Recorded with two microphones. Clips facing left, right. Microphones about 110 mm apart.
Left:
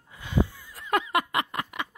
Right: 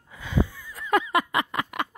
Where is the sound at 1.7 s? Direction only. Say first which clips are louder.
Right 5 dB; 75° right (ahead or behind).